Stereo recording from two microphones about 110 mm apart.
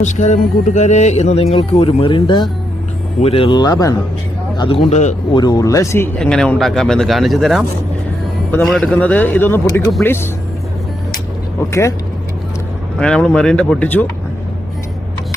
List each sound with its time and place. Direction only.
0.0 s speech: 90° left; by 2.5 s 45° left (ahead or behind)
3.2 s speech: 65° left (ahead or behind)
3.6 s speech: 35° left (ahead or behind)
4.5 s a man's voice: 50° left (ahead or behind)
4.9 s speech: 90° left
5.3 s speech: 40° left (ahead or behind)
6.1 s speech: 5° left (ahead or behind)
8.6 s speech: centre (ahead or behind)
8.9 s speech: 15° left (ahead or behind)
11.7 s speech: 25° left (ahead or behind)
13.0 s speech: 5° left (ahead or behind)